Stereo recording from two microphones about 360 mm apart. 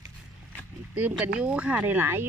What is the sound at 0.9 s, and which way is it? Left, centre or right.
Speech, centre.